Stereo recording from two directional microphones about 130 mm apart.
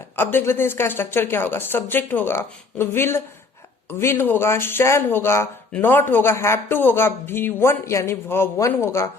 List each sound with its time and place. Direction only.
0.2 s a man's voice: 15° left (ahead or behind)